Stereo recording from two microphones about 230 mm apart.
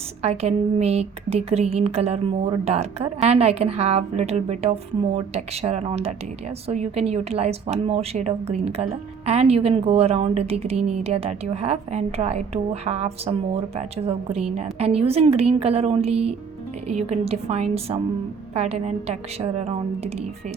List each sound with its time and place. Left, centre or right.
0.2 s speech: right